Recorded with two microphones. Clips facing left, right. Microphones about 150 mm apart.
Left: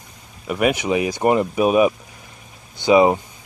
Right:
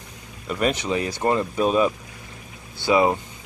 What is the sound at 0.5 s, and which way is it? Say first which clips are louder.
Speech: left 4 dB; 10° left (ahead or behind).